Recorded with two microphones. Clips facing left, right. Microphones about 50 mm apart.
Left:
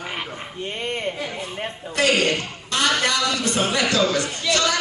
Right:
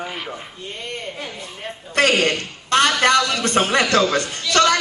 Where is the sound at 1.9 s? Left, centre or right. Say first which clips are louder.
Right 2 dB; right.